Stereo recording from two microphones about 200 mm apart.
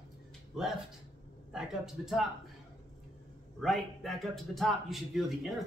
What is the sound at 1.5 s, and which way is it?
Speech, 5° right (ahead or behind).